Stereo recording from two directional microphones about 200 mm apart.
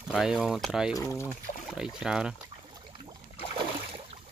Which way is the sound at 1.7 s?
5° right (ahead or behind).